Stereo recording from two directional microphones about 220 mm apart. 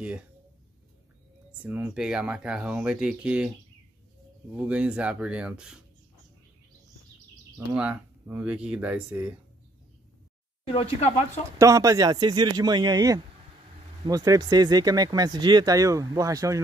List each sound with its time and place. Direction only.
1.6 s speech: 10° right (ahead or behind)
4.6 s speech: 5° right (ahead or behind)
7.5 s speech: 5° right (ahead or behind)
10.7 s speech: 30° left (ahead or behind)
11.5 s speech: 15° right (ahead or behind)